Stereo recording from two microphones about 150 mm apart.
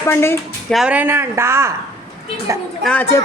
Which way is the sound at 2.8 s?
10° left (ahead or behind).